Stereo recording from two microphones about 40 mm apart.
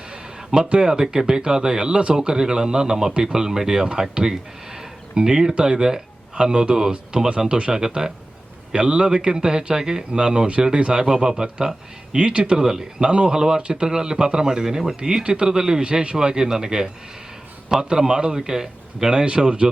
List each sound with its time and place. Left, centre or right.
0.1 s a man's voice: right
11.1 s speech: centre
11.4 s a man's voice: right